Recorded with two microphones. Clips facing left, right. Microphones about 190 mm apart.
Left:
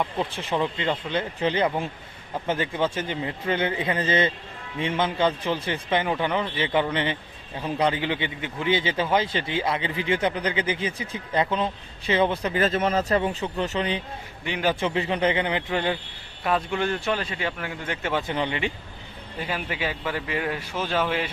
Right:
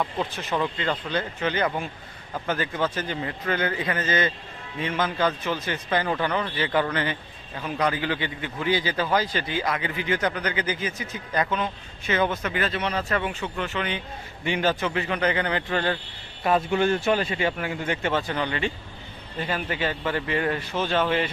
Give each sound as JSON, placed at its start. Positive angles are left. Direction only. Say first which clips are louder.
{"t": 0.0, "sound": "a man's voice", "louder": "left 1 dB", "side_deg": 25}
{"t": 16.4, "sound": "speech", "louder": "right 3 dB", "side_deg": -5}
{"t": 18.3, "sound": "a man's voice", "louder": "even", "side_deg": 20}
{"t": 19.4, "sound": "speech", "louder": "right 2 dB", "side_deg": 5}